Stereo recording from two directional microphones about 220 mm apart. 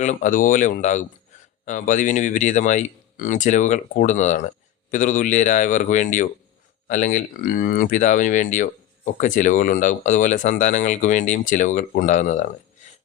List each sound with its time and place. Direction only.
0.0 s speech: 35° left (ahead or behind)